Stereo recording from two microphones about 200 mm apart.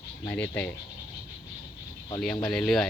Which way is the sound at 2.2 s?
Centre (ahead or behind).